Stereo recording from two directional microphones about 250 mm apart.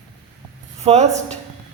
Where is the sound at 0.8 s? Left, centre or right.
Right.